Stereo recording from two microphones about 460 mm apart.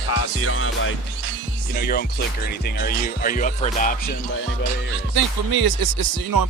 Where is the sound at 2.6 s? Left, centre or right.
Centre.